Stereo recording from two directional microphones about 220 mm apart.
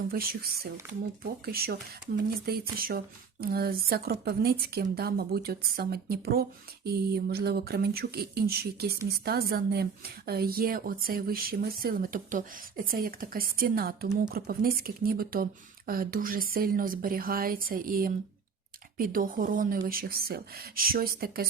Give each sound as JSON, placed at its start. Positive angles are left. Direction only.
{"t": 0.1, "sound": "a woman's voice", "side_deg": -45}